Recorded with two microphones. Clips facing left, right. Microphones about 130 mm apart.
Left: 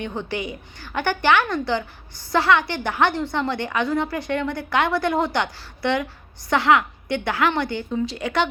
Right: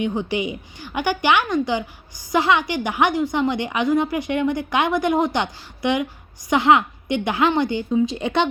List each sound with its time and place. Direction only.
0.0 s a woman's voice: 15° right (ahead or behind)